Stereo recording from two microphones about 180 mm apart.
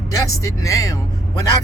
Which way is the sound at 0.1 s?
20° left (ahead or behind).